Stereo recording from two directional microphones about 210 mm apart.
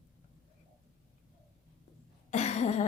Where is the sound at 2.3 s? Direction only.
30° left (ahead or behind).